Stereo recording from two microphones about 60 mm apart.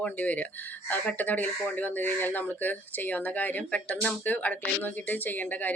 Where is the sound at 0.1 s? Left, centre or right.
Left.